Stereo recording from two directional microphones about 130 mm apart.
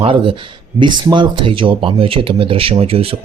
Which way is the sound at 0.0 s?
45° right (ahead or behind).